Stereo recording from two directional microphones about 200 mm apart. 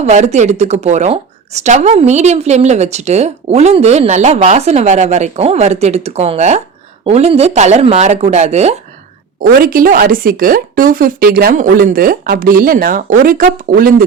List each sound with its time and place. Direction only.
0.0 s a woman's voice: 35° right (ahead or behind)
9.4 s speech: 45° right (ahead or behind)